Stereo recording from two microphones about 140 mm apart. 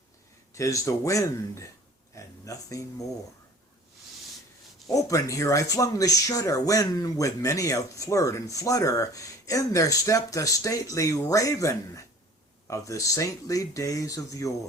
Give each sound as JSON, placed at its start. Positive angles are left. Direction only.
{"t": 0.5, "sound": "speech", "side_deg": 20}
{"t": 2.1, "sound": "a sound", "side_deg": 25}
{"t": 4.9, "sound": "speech", "side_deg": 25}